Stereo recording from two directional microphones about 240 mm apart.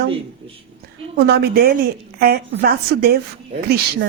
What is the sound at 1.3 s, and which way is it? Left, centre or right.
A woman's voice, right.